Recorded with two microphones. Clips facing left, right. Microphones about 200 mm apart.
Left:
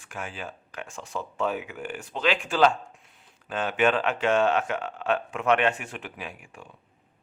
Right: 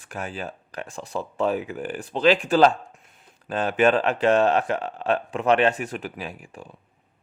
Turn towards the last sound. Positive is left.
turn(degrees=-35)  # may be behind; listen again after turning